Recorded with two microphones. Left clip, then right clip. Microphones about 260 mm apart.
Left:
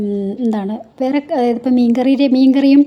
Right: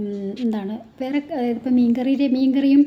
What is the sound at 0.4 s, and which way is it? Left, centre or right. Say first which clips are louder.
A woman's voice: left 6 dB; left.